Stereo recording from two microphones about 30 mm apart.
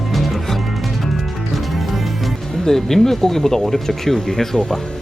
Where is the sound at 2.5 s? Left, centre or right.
Centre.